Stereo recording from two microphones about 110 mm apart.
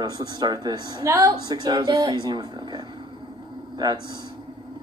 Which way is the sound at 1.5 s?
45° right (ahead or behind).